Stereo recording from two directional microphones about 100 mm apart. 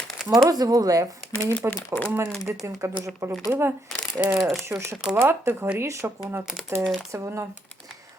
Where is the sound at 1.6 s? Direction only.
25° right (ahead or behind).